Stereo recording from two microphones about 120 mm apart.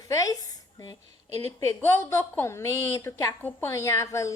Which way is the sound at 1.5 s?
25° left (ahead or behind).